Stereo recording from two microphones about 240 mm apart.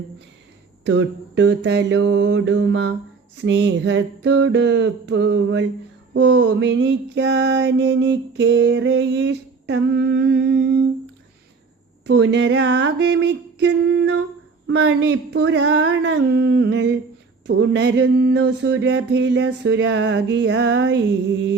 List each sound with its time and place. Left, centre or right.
0.9 s music: right
12.0 s music: right